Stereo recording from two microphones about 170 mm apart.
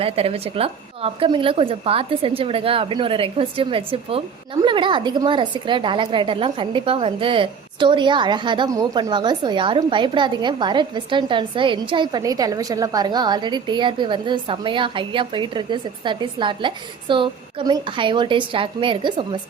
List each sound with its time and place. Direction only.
0.0 s a woman's voice: 35° right (ahead or behind)